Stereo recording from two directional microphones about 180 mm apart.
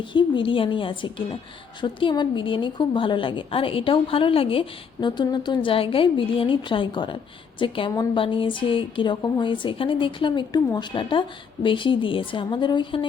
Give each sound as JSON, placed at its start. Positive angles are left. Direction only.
{"t": 0.0, "sound": "a woman's voice", "side_deg": 25}